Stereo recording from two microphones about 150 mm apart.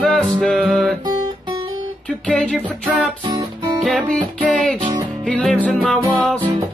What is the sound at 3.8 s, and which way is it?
Music, 5° left (ahead or behind).